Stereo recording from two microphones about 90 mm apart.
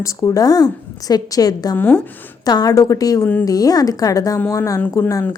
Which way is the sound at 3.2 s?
20° left (ahead or behind).